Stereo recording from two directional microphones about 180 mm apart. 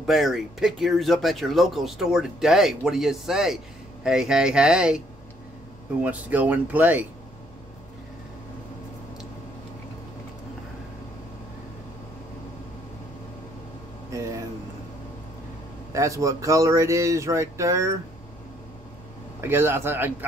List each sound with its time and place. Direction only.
0.0 s speech: centre (ahead or behind)
6.0 s speech: 10° right (ahead or behind)
15.9 s speech: 15° right (ahead or behind)
19.4 s speech: 15° right (ahead or behind)